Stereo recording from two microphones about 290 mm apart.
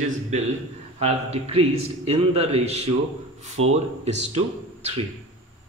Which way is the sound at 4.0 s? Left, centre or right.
Right.